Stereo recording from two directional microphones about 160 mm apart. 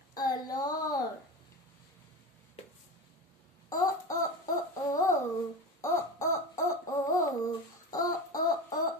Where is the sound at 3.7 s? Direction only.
20° left (ahead or behind).